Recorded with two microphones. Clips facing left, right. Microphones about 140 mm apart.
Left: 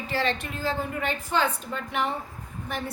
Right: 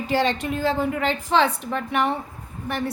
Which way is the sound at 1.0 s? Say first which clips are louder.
Right 5 dB; 90° right.